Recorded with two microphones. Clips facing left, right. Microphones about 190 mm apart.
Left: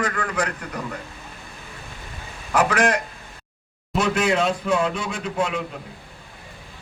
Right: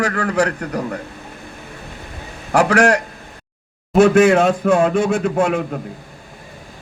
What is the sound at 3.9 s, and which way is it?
Speech, 50° right (ahead or behind).